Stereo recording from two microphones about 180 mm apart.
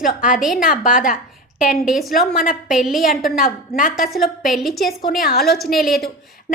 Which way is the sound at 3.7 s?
50° left (ahead or behind).